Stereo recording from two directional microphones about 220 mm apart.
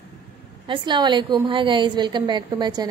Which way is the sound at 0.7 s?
20° right (ahead or behind).